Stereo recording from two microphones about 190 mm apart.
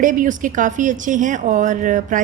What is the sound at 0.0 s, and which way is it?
A woman's voice, 45° right (ahead or behind).